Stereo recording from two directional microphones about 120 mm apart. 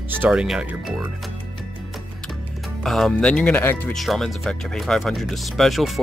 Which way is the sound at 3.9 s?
Centre (ahead or behind).